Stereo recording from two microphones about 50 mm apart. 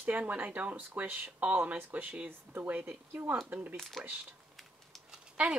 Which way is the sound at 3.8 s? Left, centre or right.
Centre.